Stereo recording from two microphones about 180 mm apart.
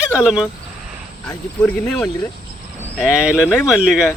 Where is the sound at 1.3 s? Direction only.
15° left (ahead or behind).